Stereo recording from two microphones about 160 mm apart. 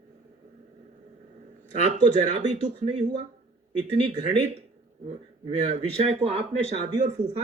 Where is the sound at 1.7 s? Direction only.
50° right (ahead or behind).